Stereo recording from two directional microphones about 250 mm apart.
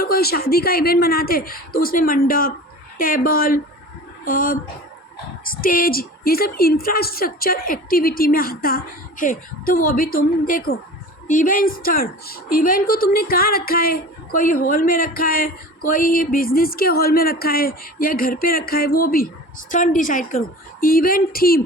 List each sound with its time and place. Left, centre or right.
0.0 s a woman's voice: left